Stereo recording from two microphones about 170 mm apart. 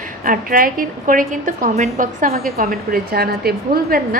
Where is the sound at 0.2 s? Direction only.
55° right (ahead or behind).